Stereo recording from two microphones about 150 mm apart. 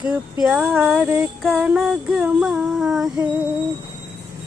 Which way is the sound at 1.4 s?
5° right (ahead or behind).